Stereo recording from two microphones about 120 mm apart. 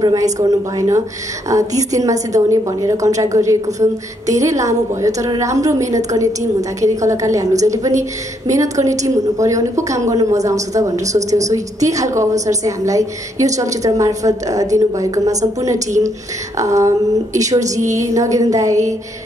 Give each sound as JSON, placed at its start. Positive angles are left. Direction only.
{"t": 0.0, "sound": "a woman's voice", "side_deg": -30}